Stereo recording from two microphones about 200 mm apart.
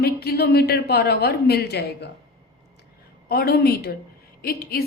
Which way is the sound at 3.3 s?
50° left (ahead or behind).